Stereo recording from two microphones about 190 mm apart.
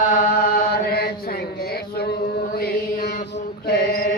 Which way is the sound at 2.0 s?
55° left (ahead or behind).